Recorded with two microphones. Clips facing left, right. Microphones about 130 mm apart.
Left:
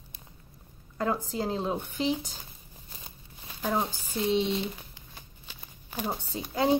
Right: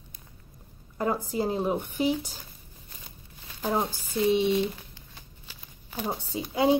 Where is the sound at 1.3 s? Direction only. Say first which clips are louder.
Right 3 dB; 15° right (ahead or behind).